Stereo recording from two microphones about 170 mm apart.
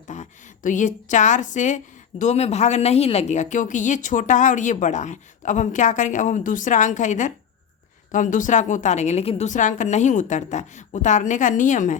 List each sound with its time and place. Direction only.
0.1 s a woman's voice: 45° left (ahead or behind)